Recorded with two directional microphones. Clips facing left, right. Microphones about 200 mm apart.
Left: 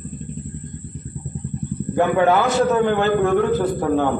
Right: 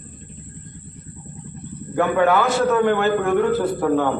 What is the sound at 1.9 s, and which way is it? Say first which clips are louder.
A man's voice: left 1 dB; 20° left (ahead or behind).